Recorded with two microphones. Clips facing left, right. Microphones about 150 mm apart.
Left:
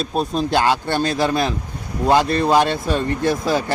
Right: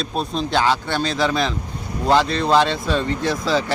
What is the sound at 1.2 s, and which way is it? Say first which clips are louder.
A man's voice: left 1 dB; 15° left (ahead or behind).